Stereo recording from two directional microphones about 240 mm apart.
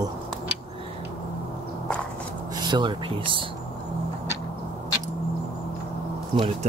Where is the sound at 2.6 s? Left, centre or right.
Centre.